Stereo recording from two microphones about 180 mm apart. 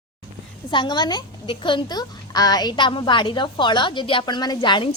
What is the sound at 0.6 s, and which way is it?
A woman's voice, 25° left (ahead or behind).